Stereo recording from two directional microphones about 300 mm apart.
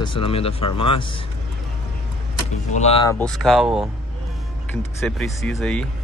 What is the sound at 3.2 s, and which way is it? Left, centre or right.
Speech, centre.